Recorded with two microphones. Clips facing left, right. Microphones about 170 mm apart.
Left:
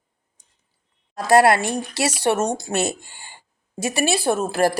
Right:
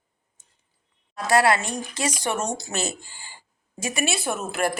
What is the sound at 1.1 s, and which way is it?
Speech, 45° left (ahead or behind).